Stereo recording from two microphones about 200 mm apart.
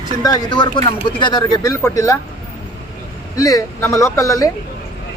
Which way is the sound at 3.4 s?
15° left (ahead or behind).